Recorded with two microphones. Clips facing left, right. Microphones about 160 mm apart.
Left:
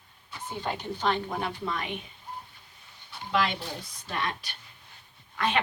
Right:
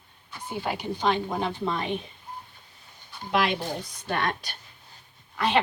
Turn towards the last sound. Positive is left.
turn(degrees=-30)  # may be behind; listen again after turning